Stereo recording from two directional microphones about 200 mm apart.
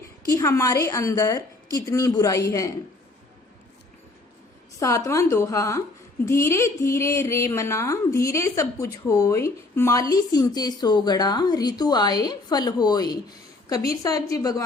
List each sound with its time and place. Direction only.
0.3 s speech: 15° left (ahead or behind)
4.8 s speech: 15° left (ahead or behind)